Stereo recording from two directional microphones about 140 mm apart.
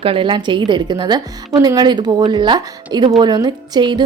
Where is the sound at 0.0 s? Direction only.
40° right (ahead or behind).